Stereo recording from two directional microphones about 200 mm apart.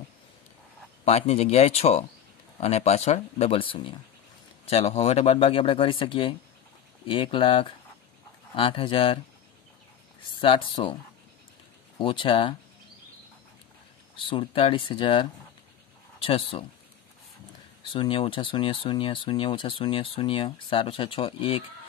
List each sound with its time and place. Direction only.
1.0 s speech: 30° left (ahead or behind)
10.4 s speech: 25° left (ahead or behind)
12.0 s speech: 25° left (ahead or behind)
14.2 s speech: 25° left (ahead or behind)
17.8 s speech: 25° left (ahead or behind)